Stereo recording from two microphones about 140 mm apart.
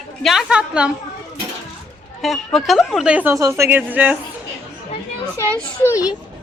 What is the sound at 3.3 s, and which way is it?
Speech, 20° right (ahead or behind).